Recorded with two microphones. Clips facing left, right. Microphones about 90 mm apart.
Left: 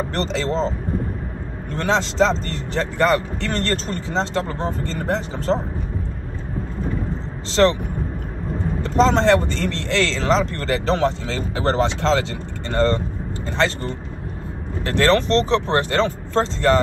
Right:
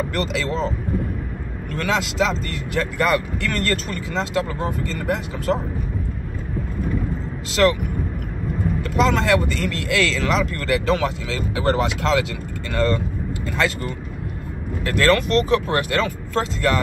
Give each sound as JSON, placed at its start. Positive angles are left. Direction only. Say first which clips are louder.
{"t": 0.1, "sound": "speech", "louder": "left 1 dB", "side_deg": 30}
{"t": 7.6, "sound": "speech", "louder": "left 1 dB", "side_deg": 30}
{"t": 8.9, "sound": "speech", "louder": "left 3 dB", "side_deg": 30}
{"t": 14.9, "sound": "speech", "louder": "left 1 dB", "side_deg": 30}